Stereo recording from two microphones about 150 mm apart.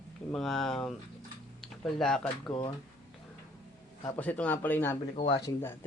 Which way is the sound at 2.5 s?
30° left (ahead or behind).